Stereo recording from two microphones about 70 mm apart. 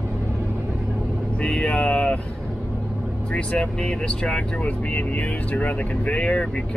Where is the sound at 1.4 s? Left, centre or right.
Centre.